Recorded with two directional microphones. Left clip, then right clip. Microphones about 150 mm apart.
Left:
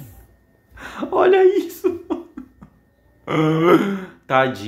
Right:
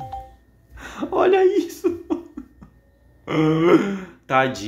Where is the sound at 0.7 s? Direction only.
10° left (ahead or behind).